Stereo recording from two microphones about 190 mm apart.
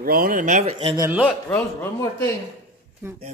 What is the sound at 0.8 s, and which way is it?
Speech, 20° right (ahead or behind).